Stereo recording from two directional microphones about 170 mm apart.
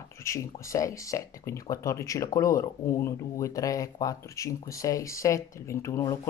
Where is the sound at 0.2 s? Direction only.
15° left (ahead or behind).